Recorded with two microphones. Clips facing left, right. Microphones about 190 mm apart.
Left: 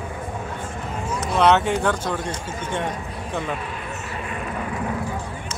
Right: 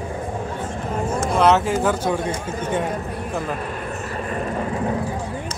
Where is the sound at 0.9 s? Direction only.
50° right (ahead or behind).